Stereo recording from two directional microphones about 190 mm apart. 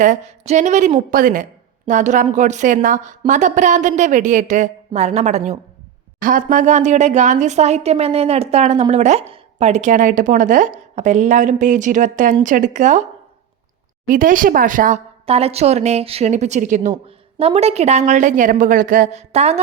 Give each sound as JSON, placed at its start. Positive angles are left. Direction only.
{"t": 0.0, "sound": "speech", "side_deg": -40}
{"t": 14.1, "sound": "speech", "side_deg": -45}